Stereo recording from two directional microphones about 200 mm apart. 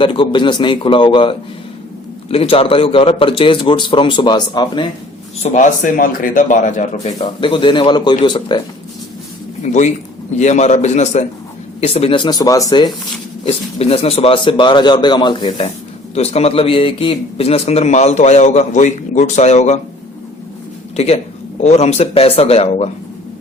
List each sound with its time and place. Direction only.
0.0 s a man's voice: 25° left (ahead or behind)
5.4 s a man's voice: 40° left (ahead or behind)
7.2 s a man's voice: 25° left (ahead or behind)
10.3 s a man's voice: 35° left (ahead or behind); by 12.9 s 20° left (ahead or behind)
13.4 s a man's voice: 30° left (ahead or behind)
20.9 s a man's voice: 30° left (ahead or behind)